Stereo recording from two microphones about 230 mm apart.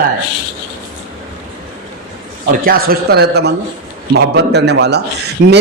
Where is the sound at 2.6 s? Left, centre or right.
Right.